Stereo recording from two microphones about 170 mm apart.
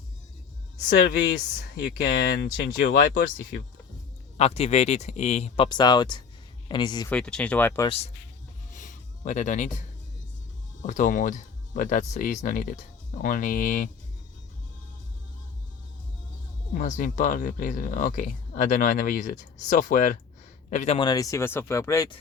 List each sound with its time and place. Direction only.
1.8 s speech: 80° left
3.0 s speech: 55° left (ahead or behind)
4.4 s speech: 35° left (ahead or behind)
5.6 s speech: 25° left (ahead or behind)
7.1 s speech: 5° left (ahead or behind)
7.9 s speech: 35° left (ahead or behind)
8.7 s a sound: 50° left (ahead or behind)
10.8 s speech: 50° left (ahead or behind)
16.7 s speech: 50° left (ahead or behind)
21.0 s speech: 20° left (ahead or behind)